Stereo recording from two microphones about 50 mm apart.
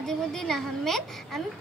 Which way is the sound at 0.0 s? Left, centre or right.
Centre.